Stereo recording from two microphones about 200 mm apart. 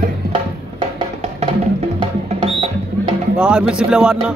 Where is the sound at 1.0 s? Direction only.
30° right (ahead or behind).